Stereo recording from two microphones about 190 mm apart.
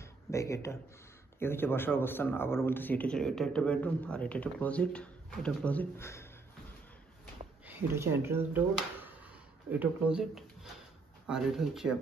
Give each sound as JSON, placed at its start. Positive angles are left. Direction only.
{"t": 0.0, "sound": "a sound", "side_deg": 15}
{"t": 1.4, "sound": "speech", "side_deg": 10}
{"t": 7.6, "sound": "speech", "side_deg": -10}